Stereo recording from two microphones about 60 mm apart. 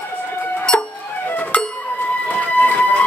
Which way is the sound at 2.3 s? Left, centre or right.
Left.